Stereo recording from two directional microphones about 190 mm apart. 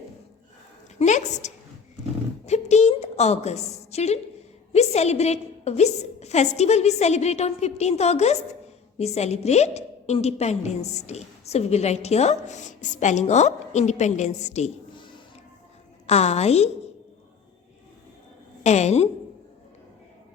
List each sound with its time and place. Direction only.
0.9 s a woman's voice: 40° left (ahead or behind)
14.9 s music: 25° left (ahead or behind)
16.0 s a woman's voice: 35° left (ahead or behind)
18.6 s a woman's voice: 35° left (ahead or behind)